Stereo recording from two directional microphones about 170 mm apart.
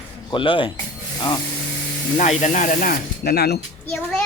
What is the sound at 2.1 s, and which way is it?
Speech, 40° left (ahead or behind).